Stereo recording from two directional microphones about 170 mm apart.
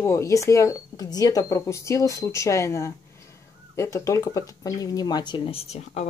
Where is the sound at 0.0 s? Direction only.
15° left (ahead or behind).